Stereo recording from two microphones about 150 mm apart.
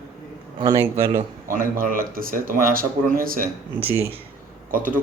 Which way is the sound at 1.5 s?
65° right (ahead or behind).